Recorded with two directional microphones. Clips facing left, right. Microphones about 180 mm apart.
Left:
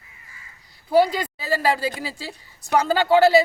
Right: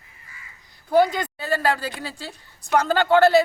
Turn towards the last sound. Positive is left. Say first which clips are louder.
# even
turn(degrees=5)  # may be behind; listen again after turning